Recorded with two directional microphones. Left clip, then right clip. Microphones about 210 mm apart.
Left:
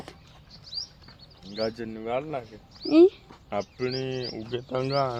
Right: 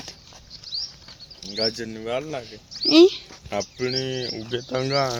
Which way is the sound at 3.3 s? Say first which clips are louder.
Right 3 dB; 55° right (ahead or behind).